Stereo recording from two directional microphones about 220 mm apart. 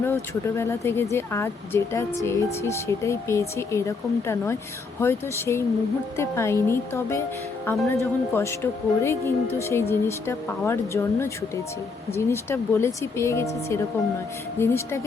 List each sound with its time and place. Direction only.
0.0 s speech: 10° left (ahead or behind)